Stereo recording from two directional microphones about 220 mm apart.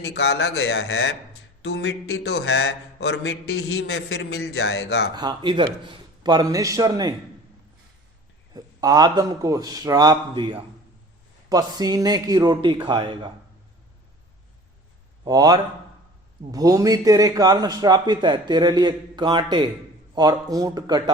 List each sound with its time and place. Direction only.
0.0 s speech: 50° left (ahead or behind)
5.1 s a man's voice: 20° right (ahead or behind)
8.5 s a man's voice: 15° right (ahead or behind)
15.2 s a man's voice: 15° right (ahead or behind)